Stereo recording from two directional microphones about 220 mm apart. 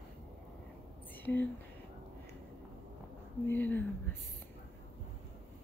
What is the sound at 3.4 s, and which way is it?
Speech, 10° left (ahead or behind).